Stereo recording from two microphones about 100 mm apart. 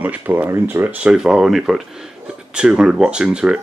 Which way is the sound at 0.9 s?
10° right (ahead or behind).